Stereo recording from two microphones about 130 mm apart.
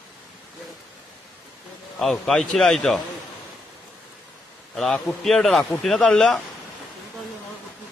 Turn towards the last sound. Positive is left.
turn(degrees=5)  # may be behind; listen again after turning